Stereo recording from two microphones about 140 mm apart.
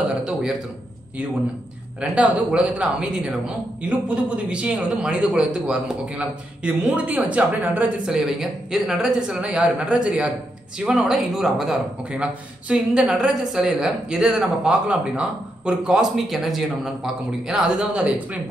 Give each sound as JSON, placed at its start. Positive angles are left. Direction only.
{"t": 0.2, "sound": "a man's voice", "side_deg": -5}
{"t": 2.0, "sound": "a man's voice", "side_deg": -10}